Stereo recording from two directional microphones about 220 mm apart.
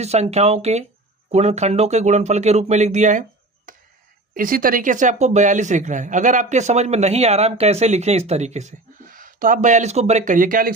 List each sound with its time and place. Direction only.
0.0 s speech: 30° right (ahead or behind)
4.4 s speech: 40° right (ahead or behind)